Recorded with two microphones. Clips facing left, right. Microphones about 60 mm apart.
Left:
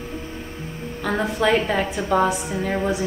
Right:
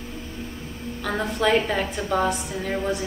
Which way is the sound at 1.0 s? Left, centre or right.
Centre.